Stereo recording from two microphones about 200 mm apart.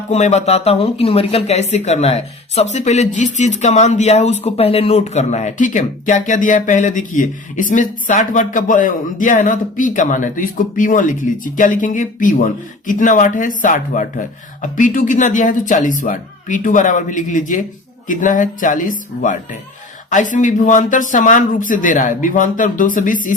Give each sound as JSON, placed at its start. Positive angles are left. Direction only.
{"t": 0.1, "sound": "speech", "side_deg": 35}